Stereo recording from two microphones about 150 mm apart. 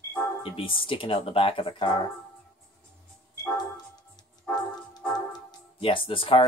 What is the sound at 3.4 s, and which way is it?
Music, 25° left (ahead or behind).